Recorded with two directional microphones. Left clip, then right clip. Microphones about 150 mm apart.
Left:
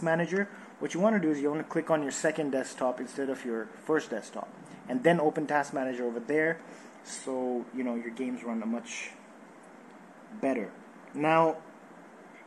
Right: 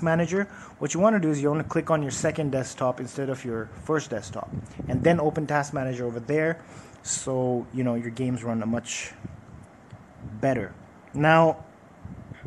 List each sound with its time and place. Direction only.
0.0 s a man's voice: 35° right (ahead or behind)
2.0 s speech: 30° right (ahead or behind)
7.2 s speech: 55° right (ahead or behind)
11.1 s speech: 60° right (ahead or behind)